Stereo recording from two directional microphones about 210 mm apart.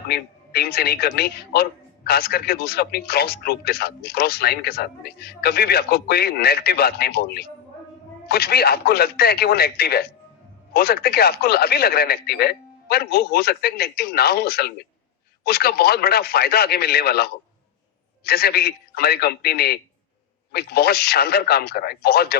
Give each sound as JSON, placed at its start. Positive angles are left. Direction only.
{"t": 0.1, "sound": "speech", "side_deg": 50}